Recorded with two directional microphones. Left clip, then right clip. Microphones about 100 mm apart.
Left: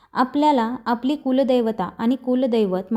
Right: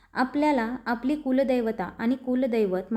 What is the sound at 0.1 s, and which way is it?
A woman's voice, 40° left (ahead or behind).